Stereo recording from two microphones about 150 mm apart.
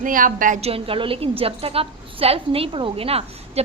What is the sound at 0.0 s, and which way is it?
Speech, 65° right (ahead or behind).